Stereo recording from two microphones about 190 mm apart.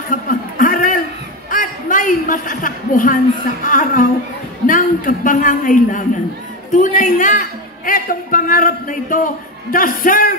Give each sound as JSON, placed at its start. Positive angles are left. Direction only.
{"t": 0.1, "sound": "chuckle", "side_deg": 45}
{"t": 1.5, "sound": "a sound", "side_deg": 45}
{"t": 3.6, "sound": "a man's voice", "side_deg": 45}